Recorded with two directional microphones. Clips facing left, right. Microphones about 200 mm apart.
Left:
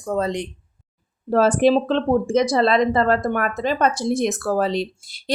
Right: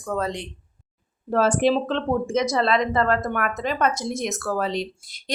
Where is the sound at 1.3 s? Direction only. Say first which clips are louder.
Left 4 dB; 35° left (ahead or behind).